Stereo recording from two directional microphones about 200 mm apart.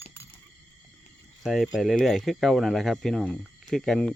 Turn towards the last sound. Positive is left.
turn(degrees=0)  # may be behind; listen again after turning